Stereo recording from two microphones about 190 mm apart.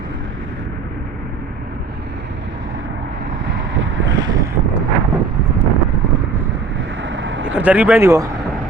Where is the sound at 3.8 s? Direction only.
90° right.